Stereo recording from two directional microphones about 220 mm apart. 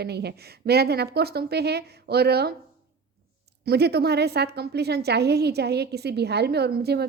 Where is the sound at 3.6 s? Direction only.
45° right (ahead or behind).